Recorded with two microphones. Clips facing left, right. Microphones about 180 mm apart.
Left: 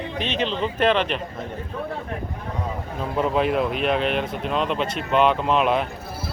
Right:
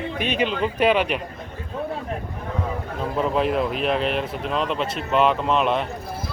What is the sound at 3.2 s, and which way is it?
Speech, centre (ahead or behind).